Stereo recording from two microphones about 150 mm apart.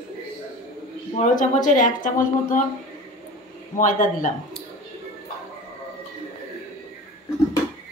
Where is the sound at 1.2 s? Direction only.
60° left (ahead or behind).